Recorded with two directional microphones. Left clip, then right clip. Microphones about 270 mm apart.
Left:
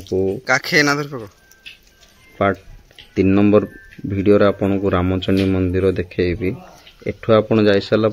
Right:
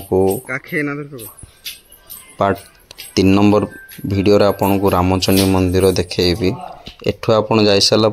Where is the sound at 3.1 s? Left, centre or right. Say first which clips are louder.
Right 1 dB; centre.